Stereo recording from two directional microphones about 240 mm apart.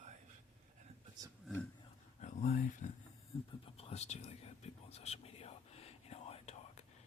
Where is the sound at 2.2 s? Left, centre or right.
Left.